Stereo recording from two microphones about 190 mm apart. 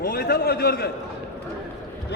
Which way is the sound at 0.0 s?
50° left (ahead or behind).